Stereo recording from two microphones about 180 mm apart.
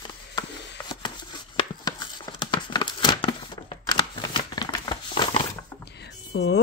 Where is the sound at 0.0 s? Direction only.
25° left (ahead or behind).